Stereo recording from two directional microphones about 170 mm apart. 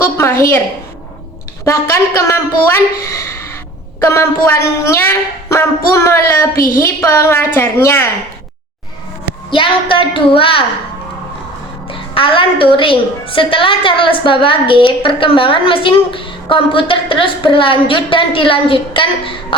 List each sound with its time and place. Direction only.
0.0 s speech: 15° left (ahead or behind)
1.6 s speech: 15° left (ahead or behind)
9.5 s a woman's voice: 30° left (ahead or behind)
11.9 s a woman's voice: 30° left (ahead or behind)